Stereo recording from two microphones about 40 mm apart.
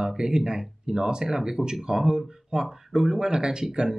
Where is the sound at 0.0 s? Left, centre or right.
Centre.